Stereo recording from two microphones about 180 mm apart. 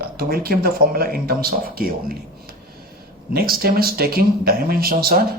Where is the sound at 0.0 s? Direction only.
55° right (ahead or behind).